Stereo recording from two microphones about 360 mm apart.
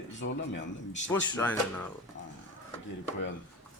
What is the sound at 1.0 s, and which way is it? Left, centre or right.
Speech, centre.